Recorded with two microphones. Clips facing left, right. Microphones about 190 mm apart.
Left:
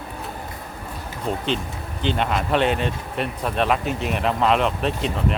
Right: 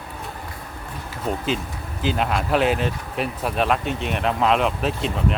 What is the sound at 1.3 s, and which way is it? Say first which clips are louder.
Speech: even; 5° right (ahead or behind).